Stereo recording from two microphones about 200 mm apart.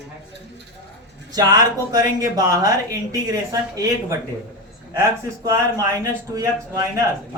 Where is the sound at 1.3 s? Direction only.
20° right (ahead or behind).